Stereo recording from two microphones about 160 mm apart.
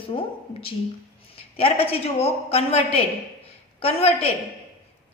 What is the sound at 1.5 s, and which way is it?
A woman's voice, 35° left (ahead or behind).